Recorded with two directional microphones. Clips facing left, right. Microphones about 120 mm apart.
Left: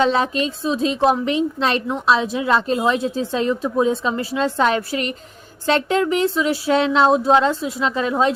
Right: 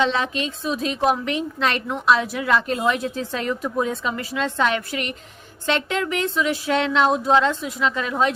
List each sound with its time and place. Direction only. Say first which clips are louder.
0.0 s speech: left 4 dB; 40° left (ahead or behind)